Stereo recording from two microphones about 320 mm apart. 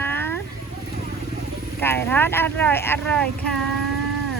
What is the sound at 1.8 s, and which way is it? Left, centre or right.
Speech, centre.